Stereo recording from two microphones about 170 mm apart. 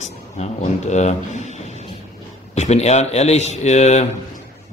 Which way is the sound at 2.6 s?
40° left (ahead or behind).